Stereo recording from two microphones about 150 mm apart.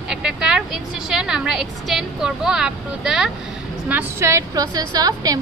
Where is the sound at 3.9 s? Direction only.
15° right (ahead or behind).